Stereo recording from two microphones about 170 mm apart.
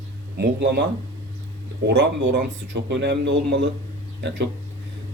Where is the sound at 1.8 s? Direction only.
90° right.